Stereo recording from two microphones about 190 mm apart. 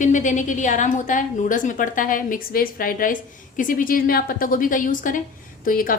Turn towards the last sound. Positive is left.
turn(degrees=45)  # may be behind; listen again after turning